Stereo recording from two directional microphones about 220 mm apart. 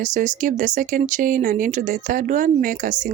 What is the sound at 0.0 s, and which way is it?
Speech, 35° right (ahead or behind).